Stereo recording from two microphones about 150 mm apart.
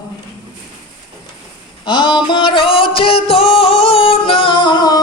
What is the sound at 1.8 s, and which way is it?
Music, 30° left (ahead or behind).